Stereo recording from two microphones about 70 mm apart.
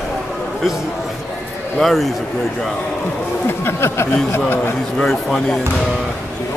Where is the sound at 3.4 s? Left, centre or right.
Left.